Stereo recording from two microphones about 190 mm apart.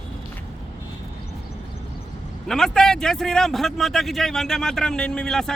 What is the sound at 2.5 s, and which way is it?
Speech, 5° left (ahead or behind).